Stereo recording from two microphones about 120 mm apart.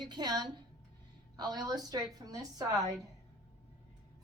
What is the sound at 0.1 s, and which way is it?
A woman's voice, 35° right (ahead or behind).